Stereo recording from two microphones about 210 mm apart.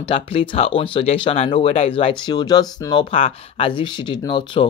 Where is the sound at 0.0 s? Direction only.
25° left (ahead or behind).